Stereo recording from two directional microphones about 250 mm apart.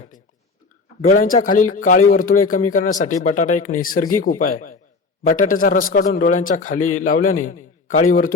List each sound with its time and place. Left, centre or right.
1.0 s a man's voice: left